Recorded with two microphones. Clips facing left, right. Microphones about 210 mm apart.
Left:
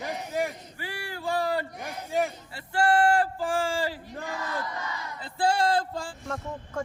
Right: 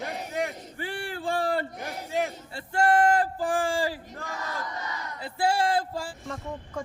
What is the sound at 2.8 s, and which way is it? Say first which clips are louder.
Speech: right 1 dB; 20° right (ahead or behind).